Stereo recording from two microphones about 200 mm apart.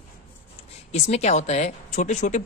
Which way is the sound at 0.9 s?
35° left (ahead or behind).